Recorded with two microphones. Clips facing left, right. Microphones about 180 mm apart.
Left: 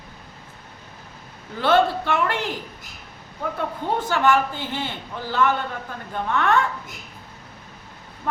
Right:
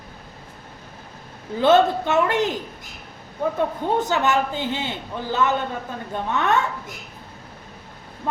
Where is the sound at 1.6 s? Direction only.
20° right (ahead or behind).